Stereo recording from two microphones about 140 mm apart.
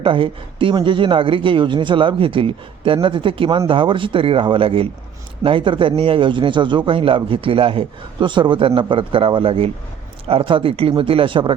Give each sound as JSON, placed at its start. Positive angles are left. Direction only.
{"t": 0.0, "sound": "speech", "side_deg": -40}